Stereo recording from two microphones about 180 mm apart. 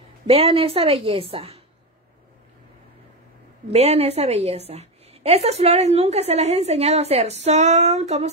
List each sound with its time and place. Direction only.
0.3 s a woman's voice: 35° right (ahead or behind)
3.7 s a woman's voice: 35° right (ahead or behind)